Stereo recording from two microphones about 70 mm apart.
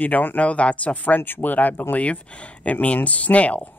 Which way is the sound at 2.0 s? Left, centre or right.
Centre.